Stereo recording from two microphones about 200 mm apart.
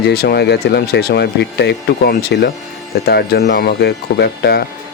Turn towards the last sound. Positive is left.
turn(degrees=55)  # may be behind; listen again after turning